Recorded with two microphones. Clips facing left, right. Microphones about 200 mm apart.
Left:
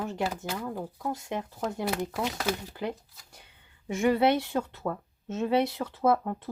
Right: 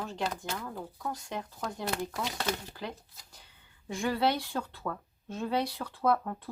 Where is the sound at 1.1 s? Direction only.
20° left (ahead or behind).